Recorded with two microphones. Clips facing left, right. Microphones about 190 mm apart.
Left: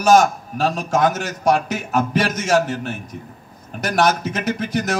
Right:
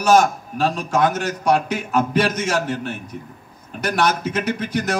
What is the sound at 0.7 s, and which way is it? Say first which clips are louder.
A man's voice: left 2 dB; 45° left (ahead or behind).